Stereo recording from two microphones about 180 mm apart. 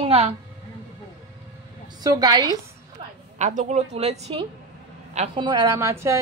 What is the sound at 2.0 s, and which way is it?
Speech, 20° right (ahead or behind).